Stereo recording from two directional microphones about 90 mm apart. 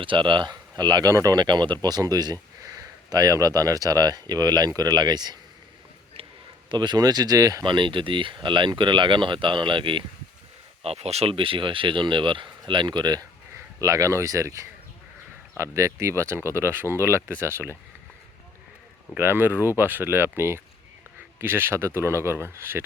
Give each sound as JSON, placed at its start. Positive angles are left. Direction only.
{"t": 0.0, "sound": "speech", "side_deg": -65}
{"t": 6.7, "sound": "speech", "side_deg": -55}
{"t": 7.6, "sound": "speech", "side_deg": -65}
{"t": 10.8, "sound": "speech", "side_deg": -90}
{"t": 13.7, "sound": "speech", "side_deg": -40}
{"t": 19.1, "sound": "speech", "side_deg": -25}